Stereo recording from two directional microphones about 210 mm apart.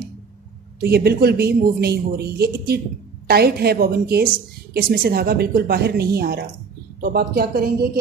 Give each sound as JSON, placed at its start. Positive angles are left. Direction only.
{"t": 0.7, "sound": "speech", "side_deg": -50}